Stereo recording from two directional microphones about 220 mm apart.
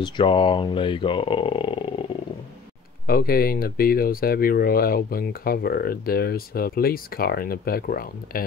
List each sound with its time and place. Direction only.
0.0 s speech: 20° left (ahead or behind)
3.1 s speech: 45° left (ahead or behind)